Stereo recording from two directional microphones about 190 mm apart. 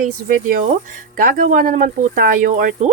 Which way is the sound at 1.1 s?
45° right (ahead or behind).